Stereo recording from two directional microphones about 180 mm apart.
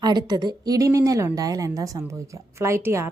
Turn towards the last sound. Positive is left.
turn(degrees=-15)  # may be behind; listen again after turning